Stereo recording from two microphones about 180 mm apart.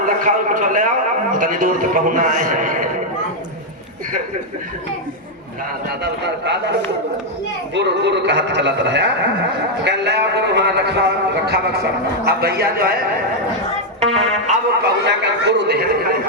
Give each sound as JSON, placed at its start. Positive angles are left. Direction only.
{"t": 0.0, "sound": "a man's voice", "side_deg": -45}
{"t": 6.0, "sound": "a man's voice", "side_deg": -70}
{"t": 14.0, "sound": "speech", "side_deg": -35}
{"t": 14.8, "sound": "a man's voice", "side_deg": -70}